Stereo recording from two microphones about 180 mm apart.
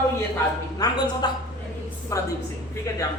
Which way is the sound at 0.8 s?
20° left (ahead or behind).